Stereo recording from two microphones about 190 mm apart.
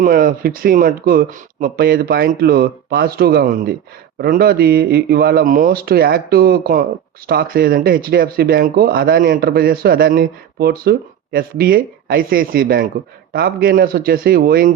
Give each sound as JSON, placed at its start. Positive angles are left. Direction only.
{"t": 0.0, "sound": "speech", "side_deg": -50}